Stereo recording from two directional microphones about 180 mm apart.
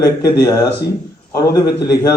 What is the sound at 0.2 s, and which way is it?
Speech, 20° left (ahead or behind).